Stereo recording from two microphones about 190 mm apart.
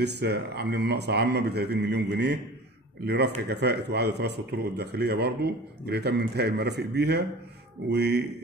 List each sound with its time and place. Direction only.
0.0 s a man's voice: 60° right (ahead or behind)